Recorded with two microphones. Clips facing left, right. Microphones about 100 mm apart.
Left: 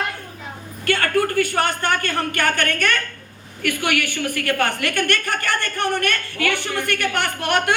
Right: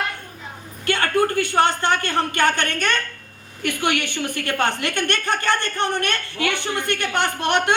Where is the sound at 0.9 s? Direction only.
25° right (ahead or behind).